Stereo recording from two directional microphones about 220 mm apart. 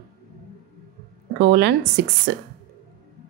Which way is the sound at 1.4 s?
50° right (ahead or behind).